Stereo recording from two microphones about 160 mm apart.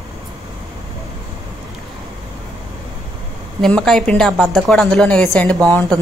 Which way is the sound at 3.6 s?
5° left (ahead or behind).